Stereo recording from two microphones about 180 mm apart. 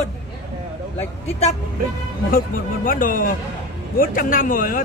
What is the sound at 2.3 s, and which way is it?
Speech, 50° left (ahead or behind).